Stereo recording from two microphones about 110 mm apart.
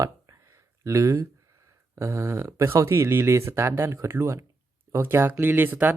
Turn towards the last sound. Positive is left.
turn(degrees=-15)  # may be behind; listen again after turning